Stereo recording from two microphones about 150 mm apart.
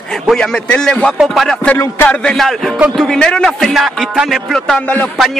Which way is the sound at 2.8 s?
Centre (ahead or behind).